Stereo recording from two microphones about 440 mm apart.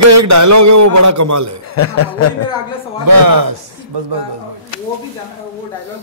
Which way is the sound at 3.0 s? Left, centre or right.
Right.